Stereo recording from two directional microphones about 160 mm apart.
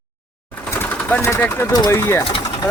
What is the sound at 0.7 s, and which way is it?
Sewing machine, 15° left (ahead or behind).